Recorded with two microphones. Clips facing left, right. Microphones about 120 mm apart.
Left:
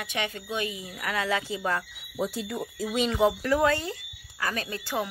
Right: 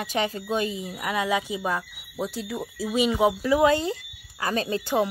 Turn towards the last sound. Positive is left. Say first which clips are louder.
# right 7 dB
turn(degrees=-25)  # may be behind; listen again after turning